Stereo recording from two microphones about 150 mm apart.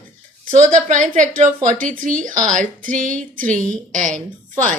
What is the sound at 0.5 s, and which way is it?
Speech, 55° right (ahead or behind).